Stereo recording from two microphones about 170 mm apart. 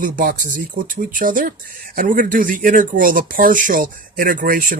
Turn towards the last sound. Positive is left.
turn(degrees=-50)  # may be behind; listen again after turning